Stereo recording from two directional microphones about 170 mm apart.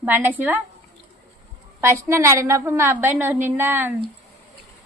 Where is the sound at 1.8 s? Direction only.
15° right (ahead or behind).